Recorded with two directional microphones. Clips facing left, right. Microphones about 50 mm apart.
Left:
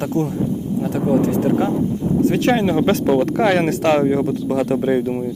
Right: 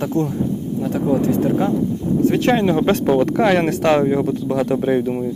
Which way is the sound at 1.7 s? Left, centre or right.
Left.